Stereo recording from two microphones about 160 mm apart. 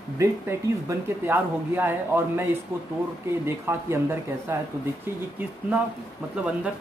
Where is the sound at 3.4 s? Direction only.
15° right (ahead or behind).